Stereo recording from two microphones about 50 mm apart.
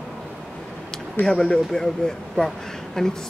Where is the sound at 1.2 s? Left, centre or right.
Centre.